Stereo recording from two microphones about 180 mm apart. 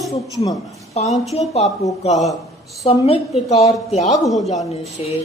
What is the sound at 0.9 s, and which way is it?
Speech, 40° left (ahead or behind).